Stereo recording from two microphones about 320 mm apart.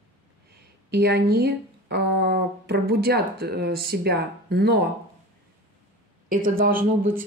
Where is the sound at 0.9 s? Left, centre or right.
Right.